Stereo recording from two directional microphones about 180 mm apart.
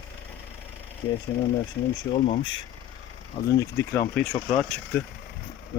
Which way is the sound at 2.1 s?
30° left (ahead or behind).